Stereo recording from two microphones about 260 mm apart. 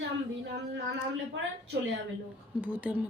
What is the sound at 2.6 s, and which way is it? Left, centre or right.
Speech, centre.